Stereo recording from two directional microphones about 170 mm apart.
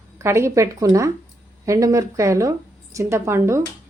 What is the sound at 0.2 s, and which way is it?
Speech, 15° right (ahead or behind).